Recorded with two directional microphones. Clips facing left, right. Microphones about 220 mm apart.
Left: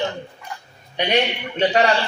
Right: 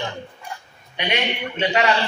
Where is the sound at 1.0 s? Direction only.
35° left (ahead or behind).